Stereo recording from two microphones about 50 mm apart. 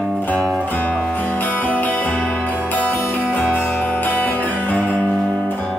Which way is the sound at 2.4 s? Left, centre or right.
Left.